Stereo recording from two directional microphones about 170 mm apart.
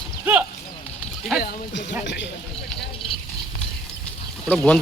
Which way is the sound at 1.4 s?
60° left (ahead or behind).